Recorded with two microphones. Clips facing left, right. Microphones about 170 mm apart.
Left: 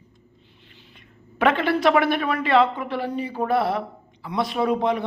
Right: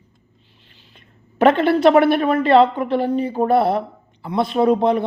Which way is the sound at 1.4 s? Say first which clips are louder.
Right 6 dB; 35° right (ahead or behind).